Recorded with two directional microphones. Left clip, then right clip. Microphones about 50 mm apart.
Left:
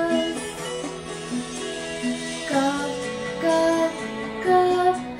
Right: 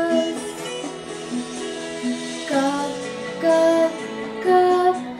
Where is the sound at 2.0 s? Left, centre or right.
Left.